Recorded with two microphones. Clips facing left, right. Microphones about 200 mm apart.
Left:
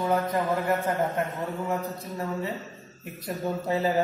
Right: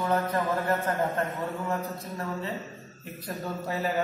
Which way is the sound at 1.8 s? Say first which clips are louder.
Left 1 dB; centre (ahead or behind).